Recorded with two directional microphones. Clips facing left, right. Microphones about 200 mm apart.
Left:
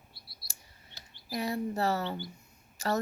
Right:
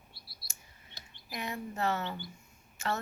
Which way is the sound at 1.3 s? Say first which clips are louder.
Left 7 dB; 35° left (ahead or behind).